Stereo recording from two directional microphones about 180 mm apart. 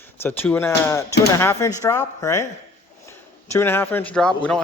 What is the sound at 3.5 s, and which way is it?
Speech, 10° left (ahead or behind).